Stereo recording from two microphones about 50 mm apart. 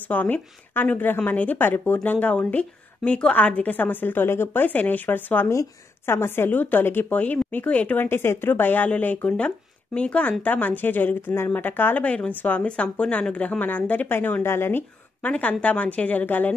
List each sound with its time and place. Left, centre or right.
0.1 s a woman's voice: left
1.3 s speech: left
1.6 s speech: left
2.0 s speech: left
3.3 s a woman's voice: left
4.6 s a woman's voice: left
6.0 s speech: left
6.5 s a woman's voice: left
7.2 s speech: left
8.0 s a woman's voice: left
14.4 s speech: left
15.2 s a woman's voice: left